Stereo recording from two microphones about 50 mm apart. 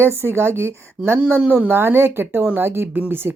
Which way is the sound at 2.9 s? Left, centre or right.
Right.